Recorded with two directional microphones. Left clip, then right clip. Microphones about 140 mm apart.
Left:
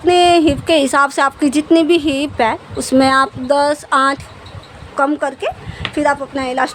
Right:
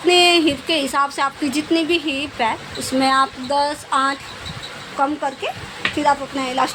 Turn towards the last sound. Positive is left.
turn(degrees=55)  # may be behind; listen again after turning